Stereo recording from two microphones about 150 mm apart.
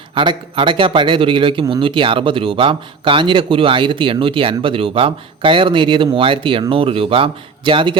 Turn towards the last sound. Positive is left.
turn(degrees=-35)  # may be behind; listen again after turning